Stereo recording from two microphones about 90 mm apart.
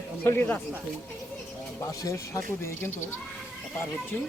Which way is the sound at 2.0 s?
35° left (ahead or behind).